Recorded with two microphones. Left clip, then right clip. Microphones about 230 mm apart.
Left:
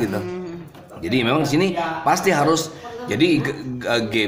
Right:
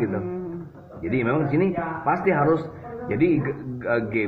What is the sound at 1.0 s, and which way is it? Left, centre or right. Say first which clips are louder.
Speech: left 4 dB; left.